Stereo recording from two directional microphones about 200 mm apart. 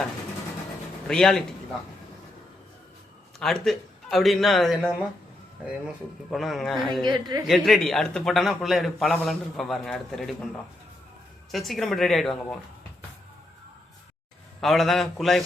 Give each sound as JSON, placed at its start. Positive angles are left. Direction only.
{"t": 1.0, "sound": "a man's voice", "side_deg": 5}
{"t": 3.4, "sound": "a man's voice", "side_deg": 0}
{"t": 7.0, "sound": "a woman's voice", "side_deg": -20}
{"t": 7.4, "sound": "a man's voice", "side_deg": 0}
{"t": 11.5, "sound": "a man's voice", "side_deg": 0}
{"t": 14.6, "sound": "a man's voice", "side_deg": 0}